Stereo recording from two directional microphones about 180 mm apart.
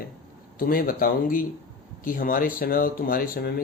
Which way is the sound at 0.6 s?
55° left (ahead or behind).